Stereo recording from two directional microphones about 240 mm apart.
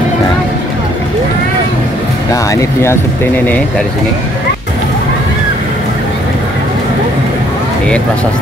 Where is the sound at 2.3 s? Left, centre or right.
Centre.